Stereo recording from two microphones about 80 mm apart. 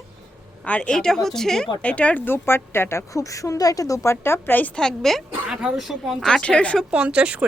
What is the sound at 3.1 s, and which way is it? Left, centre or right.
A woman's voice, left.